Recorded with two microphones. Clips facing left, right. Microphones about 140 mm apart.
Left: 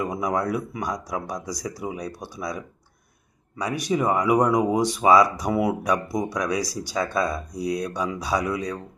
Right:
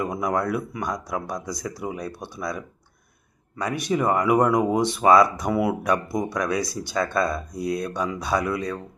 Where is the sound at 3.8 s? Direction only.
15° left (ahead or behind).